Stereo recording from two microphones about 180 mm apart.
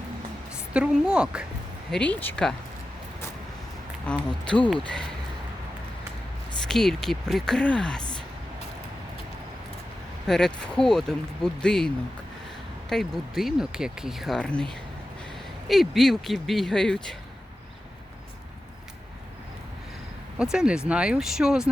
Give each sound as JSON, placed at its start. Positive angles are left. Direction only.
{"t": 0.7, "sound": "speech", "side_deg": -5}
{"t": 1.9, "sound": "speech", "side_deg": 5}
{"t": 4.0, "sound": "speech", "side_deg": 5}
{"t": 6.7, "sound": "speech", "side_deg": 0}
{"t": 10.2, "sound": "speech", "side_deg": 5}
{"t": 12.9, "sound": "speech", "side_deg": 0}
{"t": 20.4, "sound": "speech", "side_deg": -5}